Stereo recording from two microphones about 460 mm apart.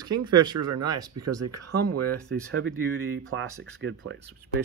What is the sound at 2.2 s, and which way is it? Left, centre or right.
Speech, centre.